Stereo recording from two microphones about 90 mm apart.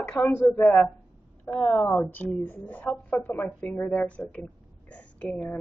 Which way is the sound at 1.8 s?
25° left (ahead or behind).